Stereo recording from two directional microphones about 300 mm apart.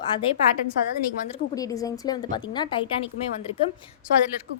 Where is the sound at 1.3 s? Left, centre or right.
Centre.